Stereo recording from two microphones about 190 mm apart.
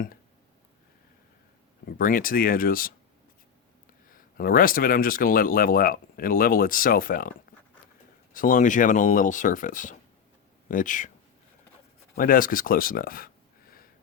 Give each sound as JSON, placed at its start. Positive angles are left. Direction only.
{"t": 2.0, "sound": "speech", "side_deg": 45}
{"t": 4.1, "sound": "speech", "side_deg": 50}
{"t": 12.1, "sound": "speech", "side_deg": 50}